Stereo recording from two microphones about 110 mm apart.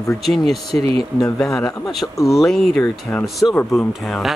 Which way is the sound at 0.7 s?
15° left (ahead or behind).